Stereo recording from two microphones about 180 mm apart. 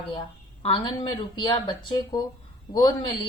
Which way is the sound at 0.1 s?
30° left (ahead or behind).